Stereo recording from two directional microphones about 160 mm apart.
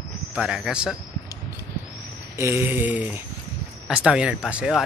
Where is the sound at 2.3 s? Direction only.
15° right (ahead or behind).